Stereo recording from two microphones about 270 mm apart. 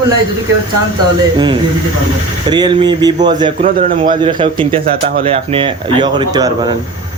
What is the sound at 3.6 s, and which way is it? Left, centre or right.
A man's voice, right.